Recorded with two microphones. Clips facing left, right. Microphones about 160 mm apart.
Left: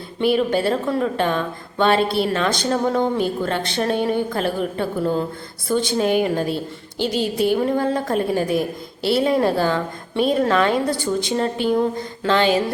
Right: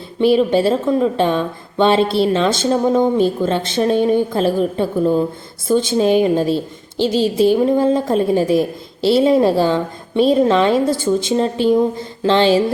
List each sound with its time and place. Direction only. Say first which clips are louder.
0.3 s a woman's voice: right 5 dB; 25° right (ahead or behind)